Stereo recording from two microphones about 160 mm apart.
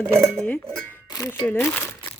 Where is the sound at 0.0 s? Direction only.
15° right (ahead or behind).